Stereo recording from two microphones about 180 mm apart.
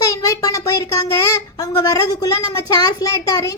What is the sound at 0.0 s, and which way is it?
Speech, 20° left (ahead or behind).